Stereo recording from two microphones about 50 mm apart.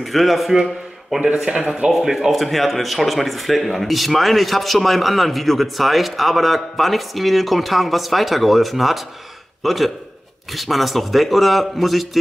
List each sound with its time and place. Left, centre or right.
0.0 s speech: centre
1.2 s speech: centre
1.9 s a man's voice: centre